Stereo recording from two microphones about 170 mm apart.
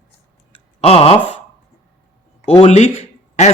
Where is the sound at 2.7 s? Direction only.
45° left (ahead or behind).